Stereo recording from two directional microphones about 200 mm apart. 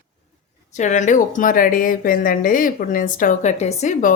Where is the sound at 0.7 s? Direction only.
35° left (ahead or behind).